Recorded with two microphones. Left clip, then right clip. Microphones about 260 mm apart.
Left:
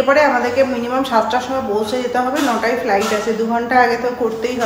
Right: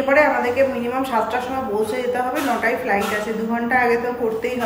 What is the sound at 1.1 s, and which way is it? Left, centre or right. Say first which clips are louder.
Speech: left 6 dB; centre.